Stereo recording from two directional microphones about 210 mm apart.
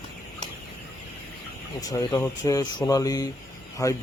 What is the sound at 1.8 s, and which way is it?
Speech, 15° left (ahead or behind).